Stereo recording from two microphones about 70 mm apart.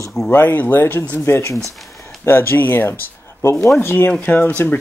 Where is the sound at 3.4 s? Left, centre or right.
Left.